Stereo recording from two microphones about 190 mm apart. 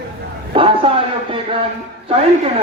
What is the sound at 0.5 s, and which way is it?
A man's voice, 30° right (ahead or behind).